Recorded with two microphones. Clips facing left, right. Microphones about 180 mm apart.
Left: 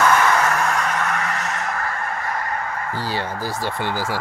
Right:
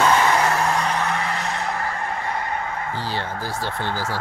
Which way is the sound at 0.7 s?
30° right (ahead or behind).